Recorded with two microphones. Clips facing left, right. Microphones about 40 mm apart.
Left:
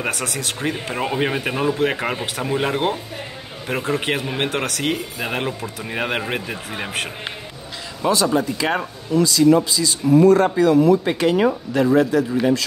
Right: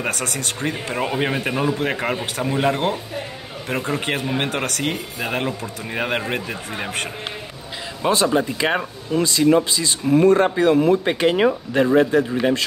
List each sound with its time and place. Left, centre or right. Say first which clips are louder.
0.0 s speech: even; centre
8.0 s speech: even; right